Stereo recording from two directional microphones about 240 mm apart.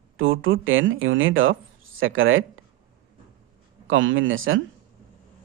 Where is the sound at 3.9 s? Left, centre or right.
Right.